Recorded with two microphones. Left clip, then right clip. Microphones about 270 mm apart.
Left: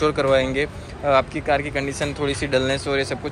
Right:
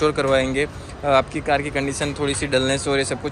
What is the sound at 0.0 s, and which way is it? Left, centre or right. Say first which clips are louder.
Speech: even; centre.